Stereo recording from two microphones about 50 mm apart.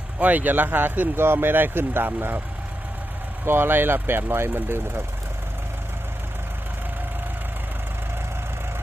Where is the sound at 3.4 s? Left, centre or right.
Right.